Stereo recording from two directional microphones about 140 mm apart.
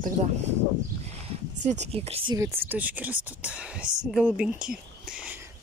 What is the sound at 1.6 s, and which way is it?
Speech, 55° right (ahead or behind).